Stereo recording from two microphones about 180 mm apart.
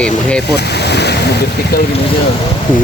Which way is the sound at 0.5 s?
65° left (ahead or behind).